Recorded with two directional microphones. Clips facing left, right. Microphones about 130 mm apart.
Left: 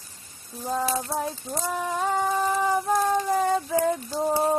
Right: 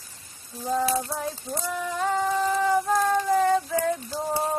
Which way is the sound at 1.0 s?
25° left (ahead or behind).